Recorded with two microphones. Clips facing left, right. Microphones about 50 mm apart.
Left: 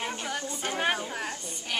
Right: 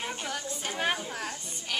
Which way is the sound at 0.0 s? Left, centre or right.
Centre.